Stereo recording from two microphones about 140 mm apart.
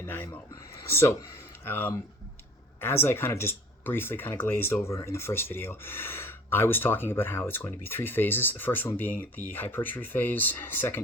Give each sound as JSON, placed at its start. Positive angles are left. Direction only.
{"t": 0.0, "sound": "speech", "side_deg": 15}